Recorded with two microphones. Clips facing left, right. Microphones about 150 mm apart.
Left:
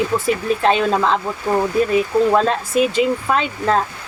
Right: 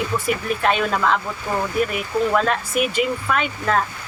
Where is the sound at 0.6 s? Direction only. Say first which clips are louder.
Left 3 dB; 30° left (ahead or behind).